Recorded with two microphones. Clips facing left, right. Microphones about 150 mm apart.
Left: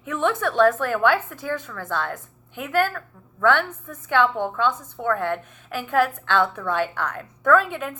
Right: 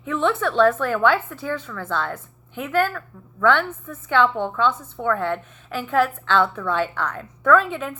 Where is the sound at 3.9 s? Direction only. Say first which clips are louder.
Right 1 dB; 50° left (ahead or behind).